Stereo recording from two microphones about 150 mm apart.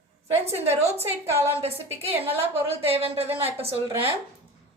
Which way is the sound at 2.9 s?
40° right (ahead or behind).